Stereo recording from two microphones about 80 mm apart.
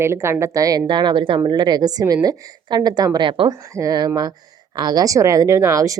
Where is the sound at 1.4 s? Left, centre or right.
Right.